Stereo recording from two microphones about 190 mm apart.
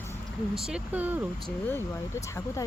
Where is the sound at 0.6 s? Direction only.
5° right (ahead or behind).